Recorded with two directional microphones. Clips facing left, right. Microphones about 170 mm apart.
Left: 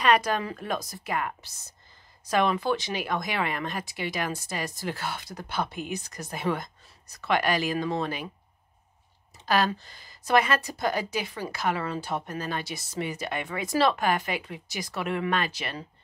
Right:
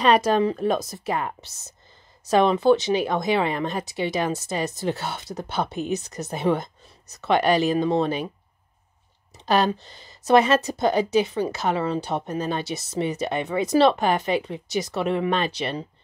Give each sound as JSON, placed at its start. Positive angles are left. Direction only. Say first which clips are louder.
{"t": 0.0, "sound": "a woman's voice", "louder": "right 5 dB", "side_deg": -30}
{"t": 9.5, "sound": "a woman's voice", "louder": "right 4 dB", "side_deg": -20}